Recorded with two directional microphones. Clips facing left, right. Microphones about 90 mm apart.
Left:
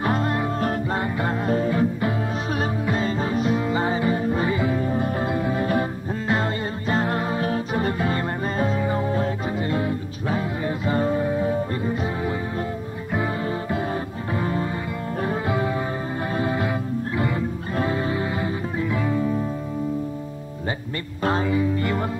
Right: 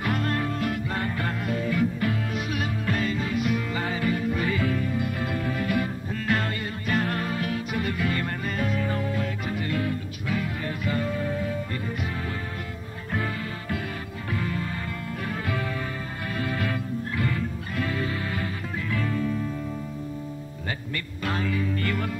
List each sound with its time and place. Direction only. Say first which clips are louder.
0.0 s music: left 4 dB; 25° left (ahead or behind)
0.6 s music: left 4 dB; 35° left (ahead or behind)
0.9 s music: left 5 dB; 25° left (ahead or behind)
1.5 s music: left 4 dB; 35° left (ahead or behind)
4.8 s music: left 5 dB; 35° left (ahead or behind)
17.7 s music: left 5 dB; 25° left (ahead or behind)
21.2 s music: left 7 dB; 25° left (ahead or behind)